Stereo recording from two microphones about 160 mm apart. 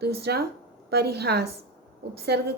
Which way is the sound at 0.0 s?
90° right.